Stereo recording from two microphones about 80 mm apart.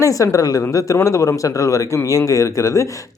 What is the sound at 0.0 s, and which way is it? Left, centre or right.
Speech, left.